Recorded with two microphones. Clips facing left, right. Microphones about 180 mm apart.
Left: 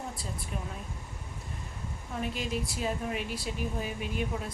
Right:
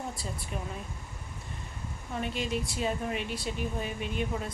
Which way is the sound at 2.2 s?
Centre (ahead or behind).